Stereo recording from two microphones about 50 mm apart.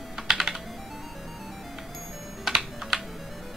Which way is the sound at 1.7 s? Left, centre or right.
Centre.